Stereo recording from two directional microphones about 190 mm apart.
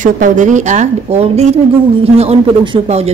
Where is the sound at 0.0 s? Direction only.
40° right (ahead or behind).